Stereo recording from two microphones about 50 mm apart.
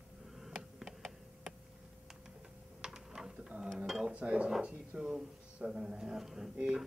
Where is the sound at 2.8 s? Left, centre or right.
Centre.